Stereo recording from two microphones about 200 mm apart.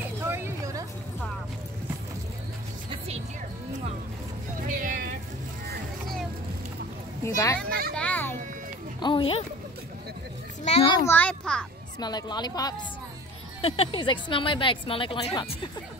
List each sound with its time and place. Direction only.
0.2 s a sound: 15° right (ahead or behind)
4.6 s music: 40° right (ahead or behind)
7.2 s a child's voice: 15° left (ahead or behind)
7.9 s children playing: 5° left (ahead or behind)
9.0 s a sound: 25° left (ahead or behind)
10.6 s children playing: 30° left (ahead or behind)
11.1 s a child's voice: 10° left (ahead or behind)
12.0 s a woman's voice: 20° left (ahead or behind)